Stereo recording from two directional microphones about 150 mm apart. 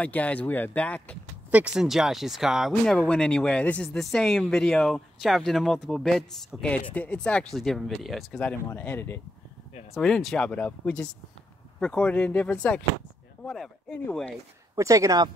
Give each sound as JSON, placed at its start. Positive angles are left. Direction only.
{"t": 0.0, "sound": "speech", "side_deg": 10}
{"t": 1.5, "sound": "speech", "side_deg": -5}
{"t": 9.9, "sound": "speech", "side_deg": 0}
{"t": 14.8, "sound": "speech", "side_deg": -20}